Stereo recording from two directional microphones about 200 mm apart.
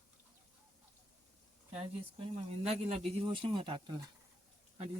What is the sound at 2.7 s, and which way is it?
Speech, 30° right (ahead or behind).